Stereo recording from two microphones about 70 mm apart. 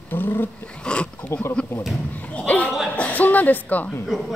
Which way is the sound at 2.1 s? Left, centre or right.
Left.